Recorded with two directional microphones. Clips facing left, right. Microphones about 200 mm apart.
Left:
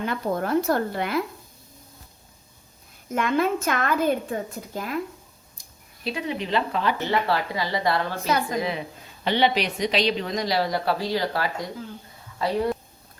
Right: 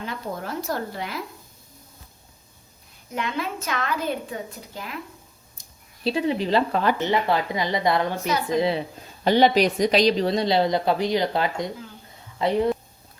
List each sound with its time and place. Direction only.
0.0 s speech: 55° left (ahead or behind)
3.2 s a woman's voice: 50° left (ahead or behind)
6.1 s speech: 30° right (ahead or behind)
7.0 s speech: 20° right (ahead or behind)
8.5 s speech: 30° right (ahead or behind)
9.2 s speech: 40° right (ahead or behind); by 12.7 s 20° right (ahead or behind)